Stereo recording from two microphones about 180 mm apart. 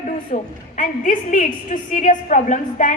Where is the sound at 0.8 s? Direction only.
45° left (ahead or behind).